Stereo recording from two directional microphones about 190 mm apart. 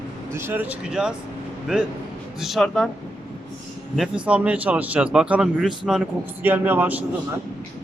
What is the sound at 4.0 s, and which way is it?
A man's voice, 5° right (ahead or behind).